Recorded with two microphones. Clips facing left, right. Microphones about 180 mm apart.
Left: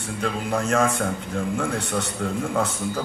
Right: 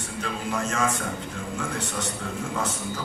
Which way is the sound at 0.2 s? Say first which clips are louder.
Left 4 dB; 55° left (ahead or behind).